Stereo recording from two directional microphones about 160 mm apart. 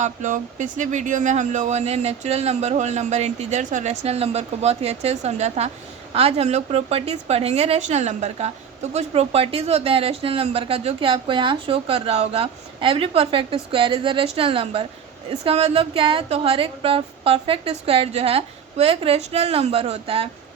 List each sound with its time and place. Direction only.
0.0 s speech: 50° right (ahead or behind)